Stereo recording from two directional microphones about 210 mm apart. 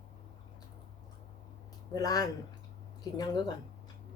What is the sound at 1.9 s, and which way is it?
Speech, 15° left (ahead or behind).